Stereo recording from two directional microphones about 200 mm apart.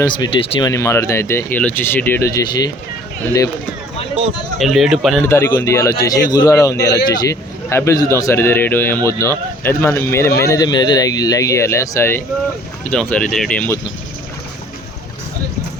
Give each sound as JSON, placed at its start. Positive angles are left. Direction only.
{"t": 0.0, "sound": "speech", "side_deg": 25}
{"t": 0.7, "sound": "a man's voice", "side_deg": 15}
{"t": 4.5, "sound": "speech", "side_deg": 0}
{"t": 5.2, "sound": "a man's voice", "side_deg": 10}
{"t": 6.7, "sound": "speech", "side_deg": 60}
{"t": 7.1, "sound": "a man's voice", "side_deg": 20}